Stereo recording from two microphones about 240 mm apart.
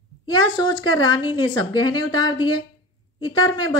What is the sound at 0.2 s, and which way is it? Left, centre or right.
Speech, centre.